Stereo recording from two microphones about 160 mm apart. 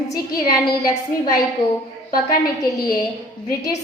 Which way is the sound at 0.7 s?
20° left (ahead or behind).